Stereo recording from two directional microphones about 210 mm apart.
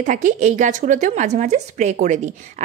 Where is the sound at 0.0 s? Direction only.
35° right (ahead or behind).